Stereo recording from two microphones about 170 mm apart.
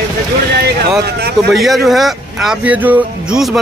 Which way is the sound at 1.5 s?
Centre (ahead or behind).